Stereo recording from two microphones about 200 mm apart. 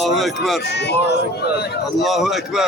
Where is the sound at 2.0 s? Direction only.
Centre (ahead or behind).